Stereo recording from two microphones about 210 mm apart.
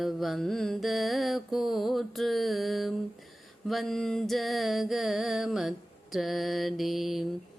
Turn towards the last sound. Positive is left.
turn(degrees=0)  # may be behind; listen again after turning